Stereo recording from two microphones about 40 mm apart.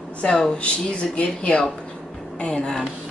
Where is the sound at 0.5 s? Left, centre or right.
Left.